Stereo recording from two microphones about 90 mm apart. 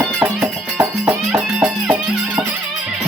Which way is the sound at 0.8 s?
10° right (ahead or behind).